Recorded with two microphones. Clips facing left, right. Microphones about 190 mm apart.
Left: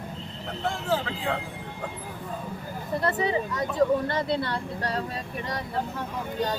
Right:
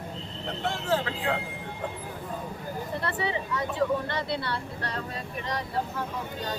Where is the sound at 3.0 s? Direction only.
40° left (ahead or behind).